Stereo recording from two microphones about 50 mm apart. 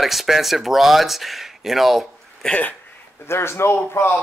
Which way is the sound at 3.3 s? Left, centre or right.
Left.